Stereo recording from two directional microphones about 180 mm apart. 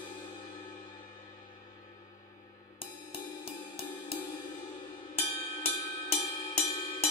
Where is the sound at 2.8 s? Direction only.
30° left (ahead or behind).